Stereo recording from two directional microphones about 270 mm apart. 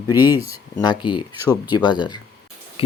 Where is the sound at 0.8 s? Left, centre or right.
Centre.